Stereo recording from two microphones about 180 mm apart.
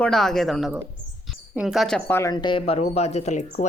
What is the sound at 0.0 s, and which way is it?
Speech, centre (ahead or behind).